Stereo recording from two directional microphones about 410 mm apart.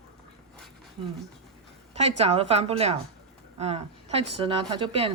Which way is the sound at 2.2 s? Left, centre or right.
Centre.